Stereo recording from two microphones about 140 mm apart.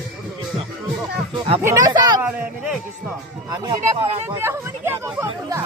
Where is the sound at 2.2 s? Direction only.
5° right (ahead or behind).